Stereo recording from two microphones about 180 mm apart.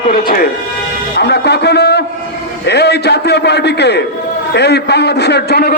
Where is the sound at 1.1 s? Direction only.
65° left (ahead or behind).